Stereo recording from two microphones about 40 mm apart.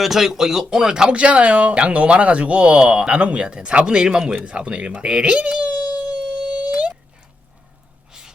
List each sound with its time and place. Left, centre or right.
0.0 s speech: centre
1.1 s speech: right
4.9 s a sound: right